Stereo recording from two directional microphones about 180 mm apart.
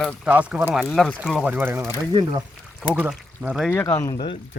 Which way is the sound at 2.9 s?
5° right (ahead or behind).